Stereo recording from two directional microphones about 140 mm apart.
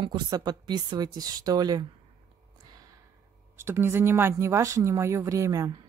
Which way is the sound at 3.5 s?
15° right (ahead or behind).